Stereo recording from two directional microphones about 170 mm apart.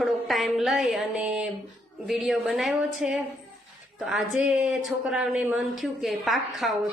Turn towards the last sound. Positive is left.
turn(degrees=0)  # may be behind; listen again after turning